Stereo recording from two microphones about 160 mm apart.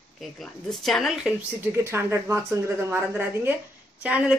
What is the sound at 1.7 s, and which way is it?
A woman's voice, 15° right (ahead or behind).